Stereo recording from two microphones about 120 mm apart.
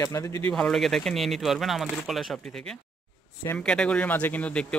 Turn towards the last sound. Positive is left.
turn(degrees=10)  # may be behind; listen again after turning